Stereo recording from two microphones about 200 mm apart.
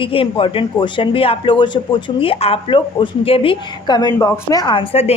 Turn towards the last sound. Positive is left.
turn(degrees=25)  # may be behind; listen again after turning